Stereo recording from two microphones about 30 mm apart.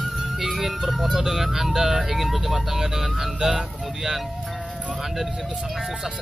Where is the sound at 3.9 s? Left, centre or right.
Centre.